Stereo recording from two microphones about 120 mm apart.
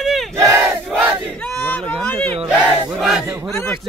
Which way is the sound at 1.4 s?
10° left (ahead or behind).